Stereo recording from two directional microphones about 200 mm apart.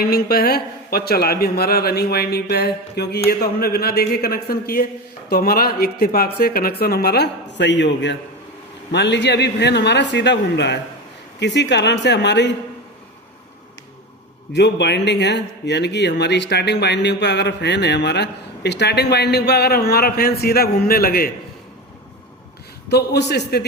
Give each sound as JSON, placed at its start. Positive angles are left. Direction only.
{"t": 0.0, "sound": "a man's voice", "side_deg": 50}
{"t": 14.5, "sound": "a man's voice", "side_deg": 60}
{"t": 22.9, "sound": "a man's voice", "side_deg": 55}